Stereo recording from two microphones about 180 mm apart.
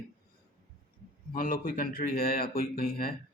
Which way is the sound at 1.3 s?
50° left (ahead or behind).